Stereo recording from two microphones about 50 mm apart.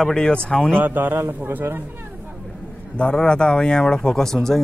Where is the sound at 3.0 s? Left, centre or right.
Centre.